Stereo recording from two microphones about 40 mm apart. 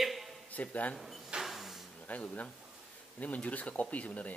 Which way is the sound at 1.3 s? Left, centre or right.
Centre.